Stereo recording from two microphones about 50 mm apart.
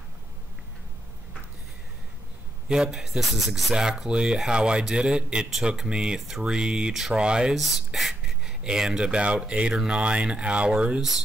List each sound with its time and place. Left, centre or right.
2.7 s speech: centre
3.7 s a man's voice: centre
6.9 s a man's voice: centre
7.2 s a man's voice: centre
7.5 s speech: centre
8.5 s speech: centre